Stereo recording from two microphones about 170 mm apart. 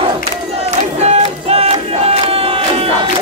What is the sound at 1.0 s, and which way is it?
Battle cry, 40° right (ahead or behind).